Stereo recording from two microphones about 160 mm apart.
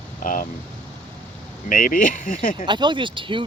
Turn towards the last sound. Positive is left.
turn(degrees=-30)  # may be behind; listen again after turning